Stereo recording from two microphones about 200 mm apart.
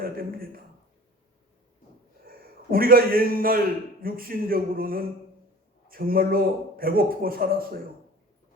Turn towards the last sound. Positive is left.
turn(degrees=-45)  # may be behind; listen again after turning